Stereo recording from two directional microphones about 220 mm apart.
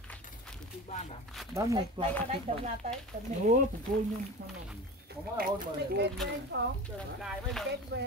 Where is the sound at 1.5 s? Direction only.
15° right (ahead or behind).